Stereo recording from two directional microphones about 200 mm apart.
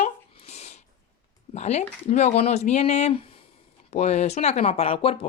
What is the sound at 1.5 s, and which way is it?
Speech, 35° left (ahead or behind).